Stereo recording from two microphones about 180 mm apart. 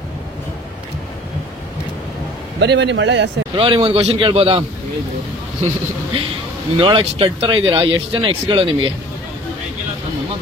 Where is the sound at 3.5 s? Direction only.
30° right (ahead or behind).